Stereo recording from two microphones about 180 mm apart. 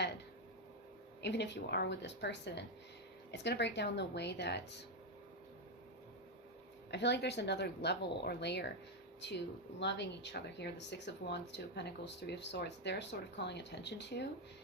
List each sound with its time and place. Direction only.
1.2 s speech: 75° left (ahead or behind)
6.9 s speech: 70° left (ahead or behind)
9.8 s speech: 75° left (ahead or behind)